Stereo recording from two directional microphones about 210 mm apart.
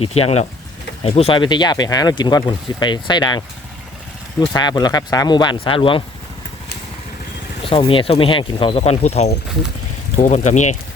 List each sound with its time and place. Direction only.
0.0 s speech: 30° left (ahead or behind)
7.6 s speech: 25° left (ahead or behind)